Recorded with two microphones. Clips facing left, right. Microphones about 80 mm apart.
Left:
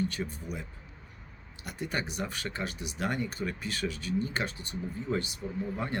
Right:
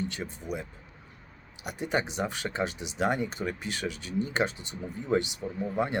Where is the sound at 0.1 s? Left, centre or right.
Right.